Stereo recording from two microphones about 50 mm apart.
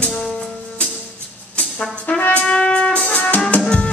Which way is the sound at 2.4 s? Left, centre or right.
Centre.